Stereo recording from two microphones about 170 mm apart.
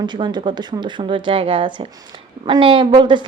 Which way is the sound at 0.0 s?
25° right (ahead or behind).